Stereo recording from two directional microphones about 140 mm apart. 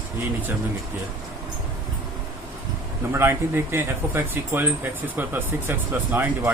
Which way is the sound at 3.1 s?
15° right (ahead or behind).